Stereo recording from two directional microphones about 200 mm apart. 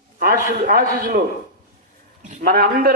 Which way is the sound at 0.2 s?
45° right (ahead or behind).